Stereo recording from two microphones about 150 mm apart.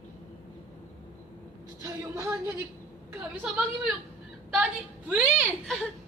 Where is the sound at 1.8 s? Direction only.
20° right (ahead or behind).